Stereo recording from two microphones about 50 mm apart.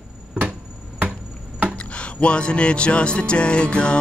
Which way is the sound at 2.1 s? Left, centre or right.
Left.